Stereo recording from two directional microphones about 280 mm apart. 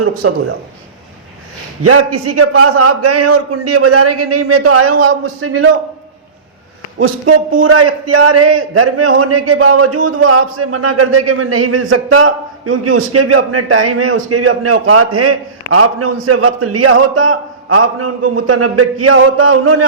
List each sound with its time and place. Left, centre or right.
0.2 s a man's voice: right
1.8 s a man's voice: right
7.0 s a man's voice: right